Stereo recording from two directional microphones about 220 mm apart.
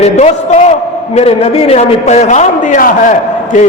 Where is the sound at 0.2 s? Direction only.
30° left (ahead or behind).